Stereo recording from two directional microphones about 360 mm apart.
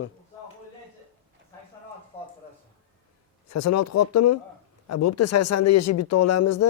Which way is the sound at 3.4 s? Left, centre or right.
Left.